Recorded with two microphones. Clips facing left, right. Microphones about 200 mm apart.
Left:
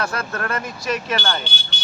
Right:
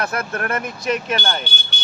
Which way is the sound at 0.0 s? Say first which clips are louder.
Right 2 dB; 20° right (ahead or behind).